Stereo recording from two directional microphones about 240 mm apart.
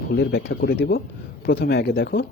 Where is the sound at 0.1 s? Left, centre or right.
Left.